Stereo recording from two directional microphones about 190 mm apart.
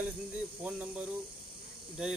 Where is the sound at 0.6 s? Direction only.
5° right (ahead or behind).